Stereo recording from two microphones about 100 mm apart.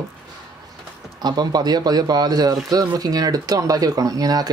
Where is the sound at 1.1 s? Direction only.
45° right (ahead or behind).